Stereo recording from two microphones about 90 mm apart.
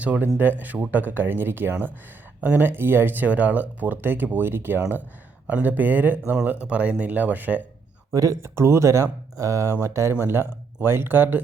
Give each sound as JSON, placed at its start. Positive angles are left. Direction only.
{"t": 0.0, "sound": "speech", "side_deg": -15}
{"t": 8.1, "sound": "speech", "side_deg": -40}